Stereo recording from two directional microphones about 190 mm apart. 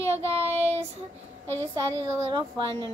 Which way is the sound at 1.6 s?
15° right (ahead or behind).